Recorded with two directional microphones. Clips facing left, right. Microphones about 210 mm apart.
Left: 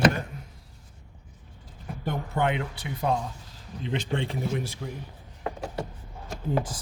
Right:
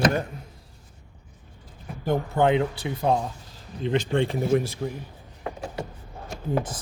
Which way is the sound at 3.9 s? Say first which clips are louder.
Right 6 dB; 45° right (ahead or behind).